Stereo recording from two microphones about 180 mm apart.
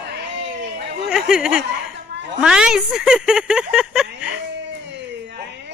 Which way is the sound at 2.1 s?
70° right (ahead or behind).